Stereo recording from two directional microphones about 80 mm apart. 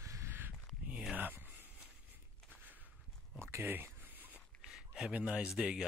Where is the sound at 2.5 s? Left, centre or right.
Right.